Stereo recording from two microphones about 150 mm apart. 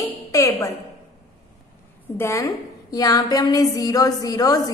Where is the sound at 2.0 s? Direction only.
15° left (ahead or behind).